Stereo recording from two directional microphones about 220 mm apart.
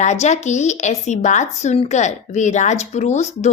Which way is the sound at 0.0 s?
30° left (ahead or behind).